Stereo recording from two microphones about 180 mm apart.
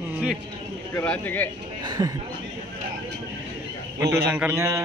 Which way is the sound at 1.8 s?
20° right (ahead or behind).